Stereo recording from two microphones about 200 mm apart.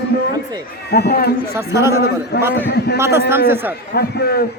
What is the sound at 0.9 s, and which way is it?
Speech, 55° left (ahead or behind).